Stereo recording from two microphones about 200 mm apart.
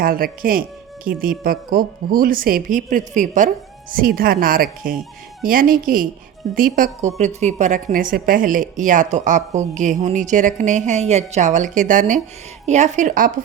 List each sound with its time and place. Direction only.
0.0 s speech: 45° right (ahead or behind)